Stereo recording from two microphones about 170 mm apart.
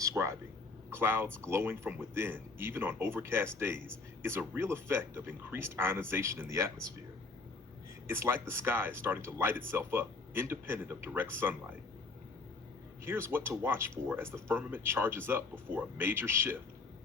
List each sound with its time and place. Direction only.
0.0 s a sound: 15° right (ahead or behind)
0.9 s speech: 15° right (ahead or behind)
8.0 s speech: 15° right (ahead or behind)
13.1 s speech: 15° right (ahead or behind)